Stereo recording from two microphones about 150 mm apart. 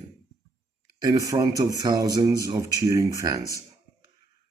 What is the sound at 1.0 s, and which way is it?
Speech, 25° right (ahead or behind).